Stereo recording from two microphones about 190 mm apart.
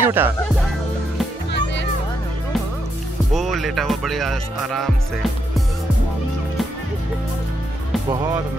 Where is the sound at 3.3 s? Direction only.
Centre (ahead or behind).